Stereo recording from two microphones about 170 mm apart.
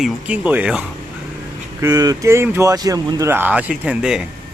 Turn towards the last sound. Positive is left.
turn(degrees=-5)  # may be behind; listen again after turning